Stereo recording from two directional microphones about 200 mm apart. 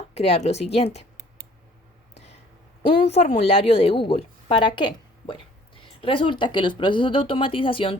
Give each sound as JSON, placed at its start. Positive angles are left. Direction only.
{"t": 0.1, "sound": "a woman's voice", "side_deg": 30}
{"t": 2.8, "sound": "a woman's voice", "side_deg": 30}